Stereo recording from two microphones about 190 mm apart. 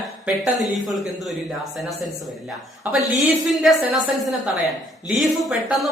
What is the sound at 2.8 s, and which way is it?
Speech, 10° right (ahead or behind).